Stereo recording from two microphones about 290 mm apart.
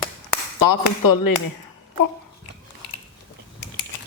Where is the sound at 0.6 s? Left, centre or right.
Left.